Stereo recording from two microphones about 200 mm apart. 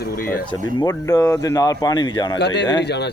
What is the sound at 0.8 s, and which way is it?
Speech, 20° left (ahead or behind).